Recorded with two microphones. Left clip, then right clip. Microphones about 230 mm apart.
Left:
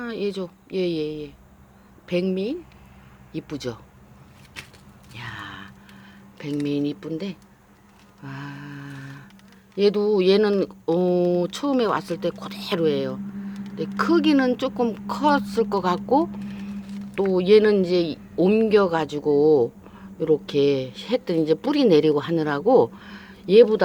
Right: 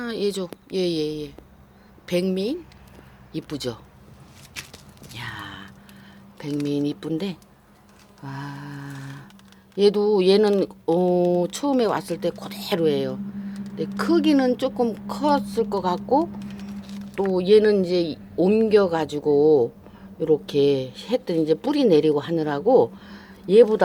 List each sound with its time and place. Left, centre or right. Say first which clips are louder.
0.0 s speech: right 2 dB; centre
5.1 s a sound: right 1 dB; centre
6.7 s speech: right 2 dB; centre